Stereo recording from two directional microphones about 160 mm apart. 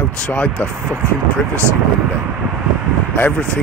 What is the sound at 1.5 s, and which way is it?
Speech, 15° right (ahead or behind).